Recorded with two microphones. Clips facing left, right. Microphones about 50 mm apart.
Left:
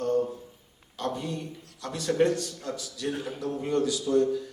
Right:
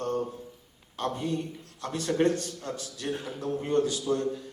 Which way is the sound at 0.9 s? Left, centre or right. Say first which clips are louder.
Right 2 dB; right.